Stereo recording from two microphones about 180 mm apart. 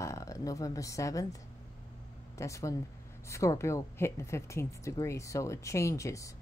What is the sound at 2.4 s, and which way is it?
Speech, 15° left (ahead or behind).